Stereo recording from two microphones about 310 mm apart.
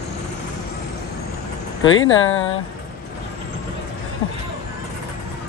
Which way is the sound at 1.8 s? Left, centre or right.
Left.